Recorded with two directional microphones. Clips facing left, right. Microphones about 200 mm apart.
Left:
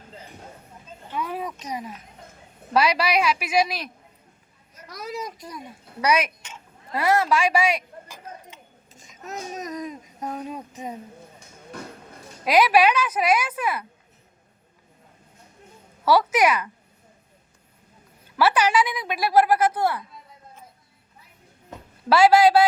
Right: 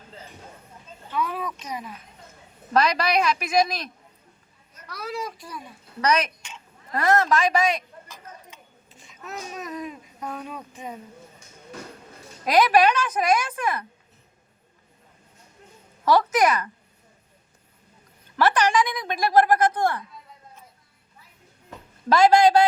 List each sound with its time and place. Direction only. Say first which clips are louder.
1.1 s a sound: right 1 dB; 15° left (ahead or behind)
2.7 s a woman's voice: even; 10° left (ahead or behind)
8.9 s babbling: left 1 dB; 45° left (ahead or behind)
10.3 s speech: left 4 dB; 25° left (ahead or behind)
12.5 s a woman's voice: even; 10° left (ahead or behind)
16.0 s a woman's voice: even; 10° left (ahead or behind)
18.3 s a woman's voice: even; 10° left (ahead or behind)
22.1 s a woman's voice: left 1 dB; 5° left (ahead or behind)